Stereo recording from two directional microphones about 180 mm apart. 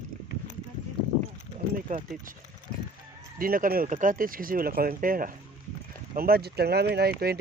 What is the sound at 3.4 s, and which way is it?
Speech, 55° right (ahead or behind).